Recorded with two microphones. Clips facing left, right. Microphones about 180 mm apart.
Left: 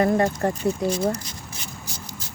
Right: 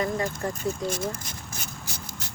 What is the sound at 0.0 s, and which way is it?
Speech, 65° left (ahead or behind).